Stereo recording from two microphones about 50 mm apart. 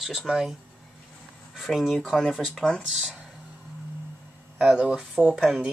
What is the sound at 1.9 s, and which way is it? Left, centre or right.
Speech, centre.